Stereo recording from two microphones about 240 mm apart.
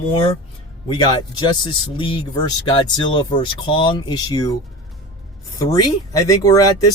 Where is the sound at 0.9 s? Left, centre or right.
Centre.